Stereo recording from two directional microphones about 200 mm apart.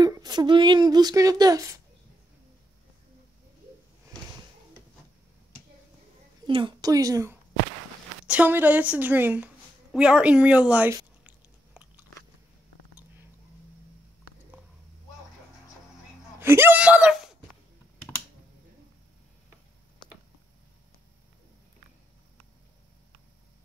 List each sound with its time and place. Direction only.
0.0 s speech: 20° right (ahead or behind)
6.4 s a woman's voice: 25° right (ahead or behind); by 11.0 s 5° right (ahead or behind)
11.2 s biting: 10° right (ahead or behind)
16.3 s a sound: 10° right (ahead or behind)